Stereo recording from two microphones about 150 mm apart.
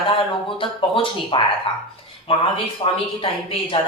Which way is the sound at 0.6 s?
35° left (ahead or behind).